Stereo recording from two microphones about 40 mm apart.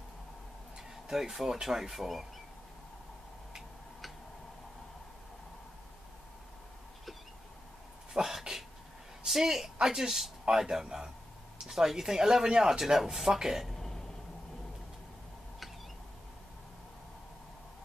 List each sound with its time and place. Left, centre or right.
0.7 s a sound: centre
1.3 s speech: centre
8.1 s cough: centre
9.2 s a woman's voice: centre
13.7 s throat clearing: centre